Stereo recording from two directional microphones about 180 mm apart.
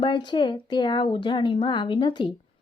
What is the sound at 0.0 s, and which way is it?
Speech, 25° left (ahead or behind).